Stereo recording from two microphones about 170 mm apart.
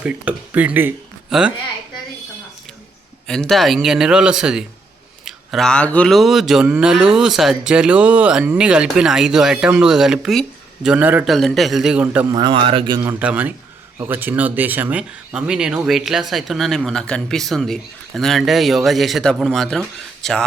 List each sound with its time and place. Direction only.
0.0 s speech: 10° right (ahead or behind)
3.2 s speech: 5° left (ahead or behind)
11.3 s speech: centre (ahead or behind)
12.3 s a man's voice: 30° right (ahead or behind)
13.1 s speech: 10° right (ahead or behind)